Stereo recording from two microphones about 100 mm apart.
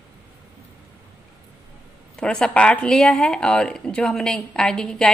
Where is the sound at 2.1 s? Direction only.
10° left (ahead or behind).